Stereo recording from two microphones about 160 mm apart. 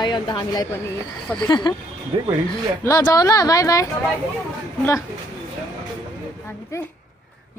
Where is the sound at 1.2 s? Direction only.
5° left (ahead or behind).